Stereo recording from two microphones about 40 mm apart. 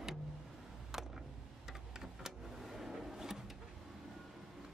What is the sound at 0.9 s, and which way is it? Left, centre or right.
Vehicle, centre.